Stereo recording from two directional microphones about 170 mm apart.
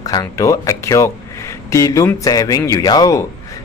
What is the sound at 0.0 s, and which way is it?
Speech, 20° left (ahead or behind).